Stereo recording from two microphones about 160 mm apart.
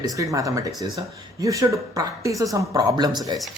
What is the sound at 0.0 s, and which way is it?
Speech, 20° right (ahead or behind).